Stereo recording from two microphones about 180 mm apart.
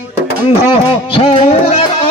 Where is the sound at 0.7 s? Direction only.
30° left (ahead or behind).